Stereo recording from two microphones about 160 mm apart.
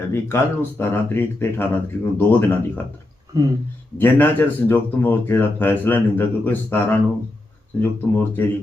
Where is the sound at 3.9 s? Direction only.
10° left (ahead or behind).